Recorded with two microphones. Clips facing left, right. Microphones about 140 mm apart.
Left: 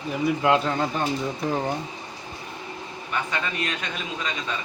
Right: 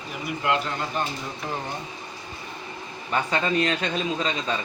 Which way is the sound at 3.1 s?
30° right (ahead or behind).